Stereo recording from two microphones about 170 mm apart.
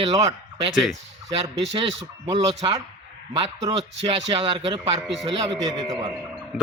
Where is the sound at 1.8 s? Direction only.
35° right (ahead or behind).